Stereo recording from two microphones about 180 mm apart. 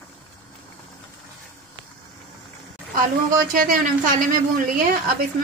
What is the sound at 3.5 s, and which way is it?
A woman's voice, 50° right (ahead or behind).